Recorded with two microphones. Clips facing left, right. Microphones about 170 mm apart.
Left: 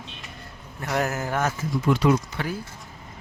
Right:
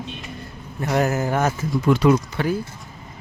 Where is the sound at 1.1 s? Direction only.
10° right (ahead or behind).